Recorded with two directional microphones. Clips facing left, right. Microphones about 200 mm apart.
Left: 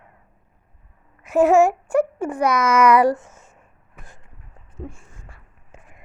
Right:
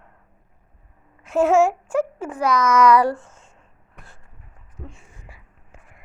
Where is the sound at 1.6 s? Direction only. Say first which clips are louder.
Left 2 dB; 10° left (ahead or behind).